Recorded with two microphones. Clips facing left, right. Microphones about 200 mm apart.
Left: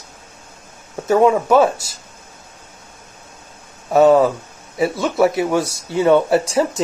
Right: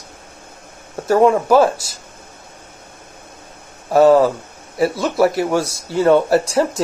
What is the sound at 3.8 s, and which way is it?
Speech, centre (ahead or behind).